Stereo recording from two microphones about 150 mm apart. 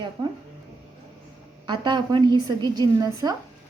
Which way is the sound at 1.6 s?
30° right (ahead or behind).